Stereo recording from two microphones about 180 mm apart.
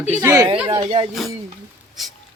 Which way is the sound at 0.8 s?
30° right (ahead or behind).